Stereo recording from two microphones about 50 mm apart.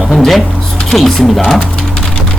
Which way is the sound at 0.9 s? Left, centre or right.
Centre.